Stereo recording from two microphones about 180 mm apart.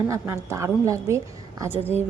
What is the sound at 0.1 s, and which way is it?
A woman's voice, 15° right (ahead or behind).